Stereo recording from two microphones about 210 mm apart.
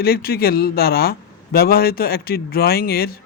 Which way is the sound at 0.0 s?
45° left (ahead or behind).